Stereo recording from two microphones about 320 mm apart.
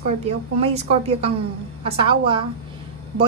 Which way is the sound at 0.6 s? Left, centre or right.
Centre.